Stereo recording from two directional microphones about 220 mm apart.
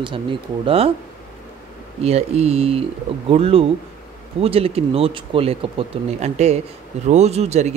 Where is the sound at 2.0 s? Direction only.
30° right (ahead or behind).